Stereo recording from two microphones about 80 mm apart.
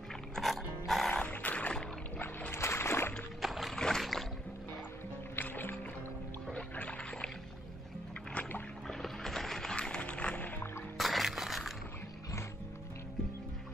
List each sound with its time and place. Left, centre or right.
0.4 s music: centre
1.1 s a sound: centre
2.1 s boat: left
3.3 s rowboat: centre
5.3 s music: left
8.8 s music: centre
11.0 s music: centre